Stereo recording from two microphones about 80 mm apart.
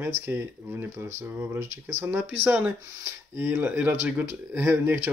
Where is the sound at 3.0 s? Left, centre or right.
Right.